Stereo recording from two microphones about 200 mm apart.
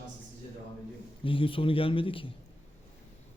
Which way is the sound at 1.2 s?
25° left (ahead or behind).